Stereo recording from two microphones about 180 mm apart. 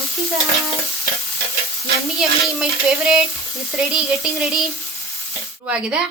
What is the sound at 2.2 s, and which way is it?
Speech, 5° right (ahead or behind).